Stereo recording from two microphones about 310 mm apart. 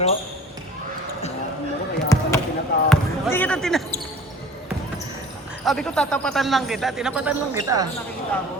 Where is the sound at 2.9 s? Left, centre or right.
Centre.